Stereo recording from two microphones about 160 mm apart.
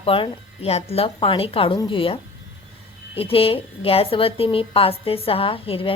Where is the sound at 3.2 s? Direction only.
35° left (ahead or behind).